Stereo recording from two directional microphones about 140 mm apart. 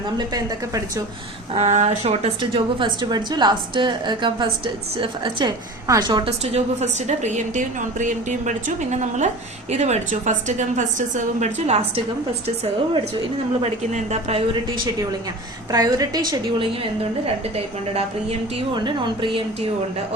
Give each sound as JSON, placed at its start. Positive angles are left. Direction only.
{"t": 0.2, "sound": "a woman's voice", "side_deg": -25}
{"t": 1.5, "sound": "a woman's voice", "side_deg": -55}
{"t": 6.4, "sound": "a woman's voice", "side_deg": -50}
{"t": 13.6, "sound": "a woman's voice", "side_deg": -50}
{"t": 15.7, "sound": "a woman's voice", "side_deg": -25}
{"t": 16.3, "sound": "a woman's voice", "side_deg": -40}
{"t": 18.7, "sound": "a woman's voice", "side_deg": -35}